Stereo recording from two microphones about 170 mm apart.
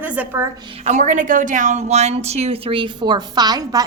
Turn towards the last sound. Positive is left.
turn(degrees=-20)  # may be behind; listen again after turning